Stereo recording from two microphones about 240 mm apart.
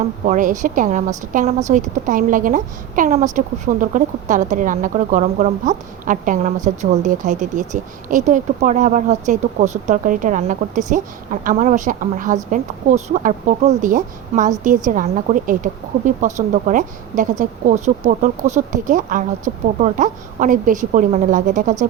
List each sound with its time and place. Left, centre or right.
0.3 s speech: right